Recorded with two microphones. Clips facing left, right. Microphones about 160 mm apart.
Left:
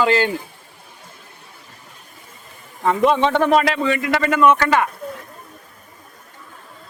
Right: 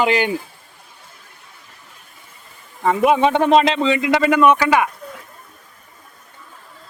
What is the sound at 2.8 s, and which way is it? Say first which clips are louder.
A man's voice: right 1 dB; 10° right (ahead or behind).